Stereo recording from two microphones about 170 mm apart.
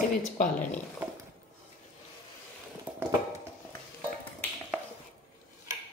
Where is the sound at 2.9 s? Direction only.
10° right (ahead or behind).